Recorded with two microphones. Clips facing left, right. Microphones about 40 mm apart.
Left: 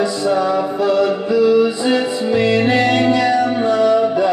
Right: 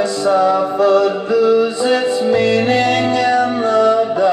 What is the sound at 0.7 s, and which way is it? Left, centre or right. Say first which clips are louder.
Music: right 2 dB; left.